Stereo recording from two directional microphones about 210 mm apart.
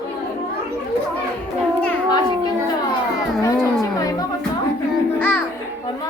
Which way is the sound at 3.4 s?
15° left (ahead or behind).